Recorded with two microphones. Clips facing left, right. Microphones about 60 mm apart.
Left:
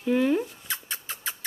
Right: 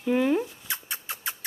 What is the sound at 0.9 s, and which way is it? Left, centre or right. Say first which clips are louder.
Rodents: even; right.